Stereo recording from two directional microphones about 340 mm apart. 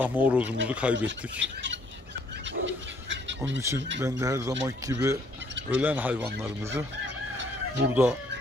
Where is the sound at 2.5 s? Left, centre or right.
Right.